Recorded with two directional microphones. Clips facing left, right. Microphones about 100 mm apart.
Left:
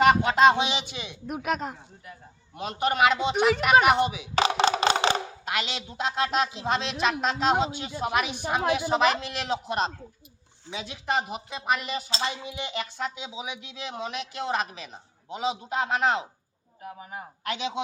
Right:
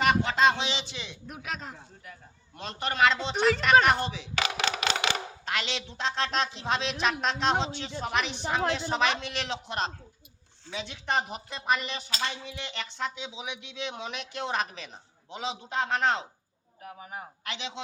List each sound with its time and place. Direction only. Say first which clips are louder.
0.2 s speech: left 5 dB; 15° left (ahead or behind)
1.3 s speech: left 10 dB; 55° left (ahead or behind)
2.6 s a woman's voice: left 3 dB; 10° left (ahead or behind)
4.4 s wood block: left 8 dB; 30° left (ahead or behind)
5.5 s a woman's voice: left 1 dB; 5° left (ahead or behind)